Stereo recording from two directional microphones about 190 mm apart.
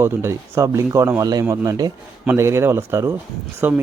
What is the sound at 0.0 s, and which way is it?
Speech, 15° right (ahead or behind).